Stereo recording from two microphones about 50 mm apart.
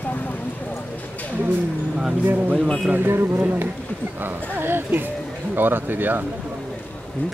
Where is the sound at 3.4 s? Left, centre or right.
Right.